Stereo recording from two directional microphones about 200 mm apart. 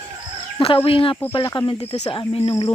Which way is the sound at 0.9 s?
25° left (ahead or behind).